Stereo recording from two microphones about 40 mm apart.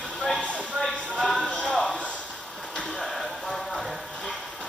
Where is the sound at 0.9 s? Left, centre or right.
Centre.